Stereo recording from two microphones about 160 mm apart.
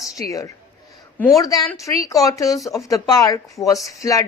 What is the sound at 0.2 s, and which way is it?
A woman's voice, 20° left (ahead or behind).